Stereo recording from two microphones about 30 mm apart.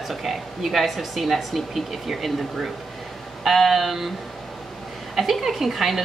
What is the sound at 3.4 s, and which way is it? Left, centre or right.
Speech, centre.